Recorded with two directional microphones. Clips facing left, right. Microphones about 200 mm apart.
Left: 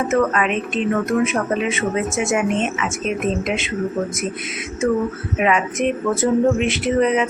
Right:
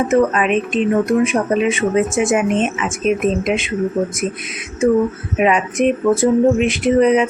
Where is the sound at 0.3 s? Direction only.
20° right (ahead or behind).